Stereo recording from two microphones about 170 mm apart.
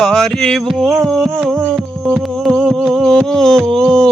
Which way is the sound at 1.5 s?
10° right (ahead or behind).